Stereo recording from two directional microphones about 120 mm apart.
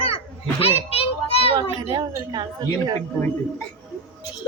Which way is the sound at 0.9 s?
55° left (ahead or behind).